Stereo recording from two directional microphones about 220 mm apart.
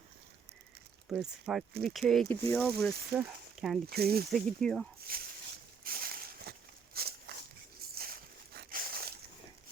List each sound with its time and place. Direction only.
1.0 s speech: 5° right (ahead or behind)
3.8 s speech: 45° right (ahead or behind)
4.3 s speech: centre (ahead or behind)
5.1 s speech: 40° right (ahead or behind)
5.8 s a sound: 40° right (ahead or behind)
6.9 s walk: 45° right (ahead or behind)
7.9 s a sound: 45° right (ahead or behind)